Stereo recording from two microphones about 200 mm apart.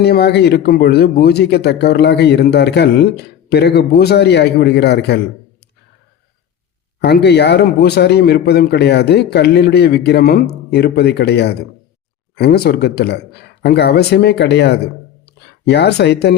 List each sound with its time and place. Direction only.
0.0 s a man's voice: 55° left (ahead or behind)
7.0 s a man's voice: 55° left (ahead or behind)